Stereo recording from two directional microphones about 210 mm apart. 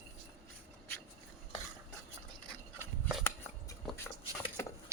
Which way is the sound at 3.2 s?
10° left (ahead or behind).